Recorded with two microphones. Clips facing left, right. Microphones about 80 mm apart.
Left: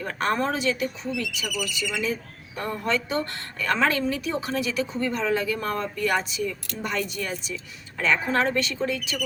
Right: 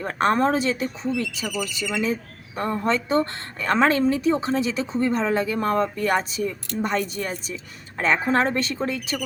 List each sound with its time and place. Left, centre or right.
0.0 s a woman's voice: right